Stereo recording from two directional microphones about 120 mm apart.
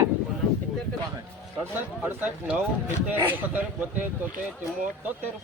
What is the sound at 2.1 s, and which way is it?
Speech, 15° right (ahead or behind).